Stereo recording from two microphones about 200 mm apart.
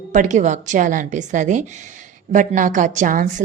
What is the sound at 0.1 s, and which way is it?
A woman's voice, 40° right (ahead or behind).